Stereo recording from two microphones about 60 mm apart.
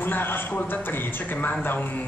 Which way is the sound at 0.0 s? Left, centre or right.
Left.